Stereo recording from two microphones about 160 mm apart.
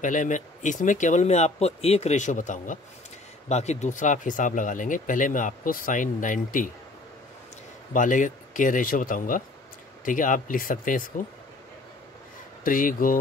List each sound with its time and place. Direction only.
0.0 s speech: 55° left (ahead or behind)
7.9 s speech: 55° left (ahead or behind)
12.6 s speech: 60° left (ahead or behind)